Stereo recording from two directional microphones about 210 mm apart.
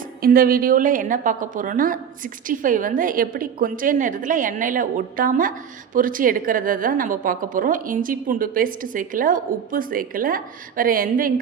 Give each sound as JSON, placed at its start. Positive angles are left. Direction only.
{"t": 0.2, "sound": "a woman's voice", "side_deg": -45}